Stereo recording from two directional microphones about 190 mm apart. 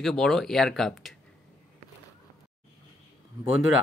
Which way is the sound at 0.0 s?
Centre (ahead or behind).